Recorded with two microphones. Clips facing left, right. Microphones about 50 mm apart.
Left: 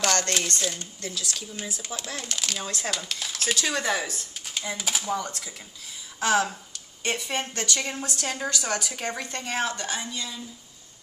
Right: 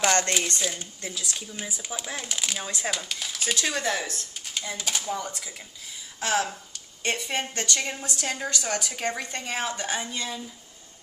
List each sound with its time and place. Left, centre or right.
0.0 s a sound: right
0.5 s speech: centre
5.1 s a woman's voice: centre
10.1 s speech: right